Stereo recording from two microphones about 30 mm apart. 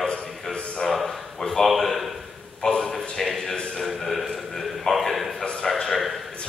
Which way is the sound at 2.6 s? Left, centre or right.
Centre.